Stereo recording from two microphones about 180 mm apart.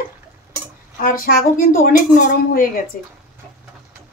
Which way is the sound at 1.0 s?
50° left (ahead or behind).